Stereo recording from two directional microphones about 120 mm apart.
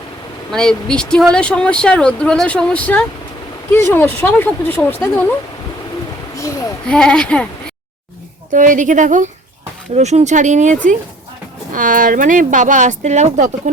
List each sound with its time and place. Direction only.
0.5 s speech: 5° left (ahead or behind)
6.8 s speech: 5° left (ahead or behind)
8.5 s speech: 90° right
9.9 s speech: 65° right (ahead or behind); by 10.8 s 90° right
11.8 s speech: 90° right